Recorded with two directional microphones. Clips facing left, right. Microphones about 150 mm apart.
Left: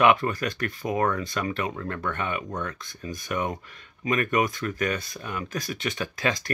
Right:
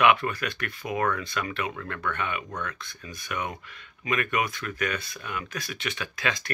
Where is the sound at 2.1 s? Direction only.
35° left (ahead or behind).